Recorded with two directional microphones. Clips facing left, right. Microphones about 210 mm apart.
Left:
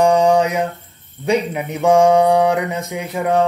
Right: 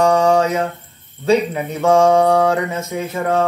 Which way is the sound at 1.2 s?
15° left (ahead or behind).